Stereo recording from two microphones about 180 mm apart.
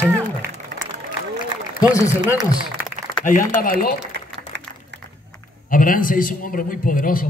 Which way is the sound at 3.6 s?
55° left (ahead or behind).